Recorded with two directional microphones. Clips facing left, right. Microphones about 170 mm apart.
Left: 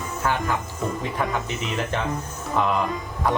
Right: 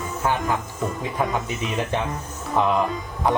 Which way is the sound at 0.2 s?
15° right (ahead or behind).